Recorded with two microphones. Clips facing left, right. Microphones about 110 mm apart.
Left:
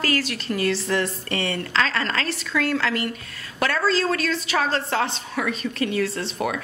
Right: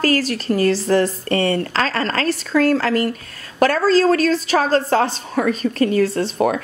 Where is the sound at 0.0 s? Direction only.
40° right (ahead or behind).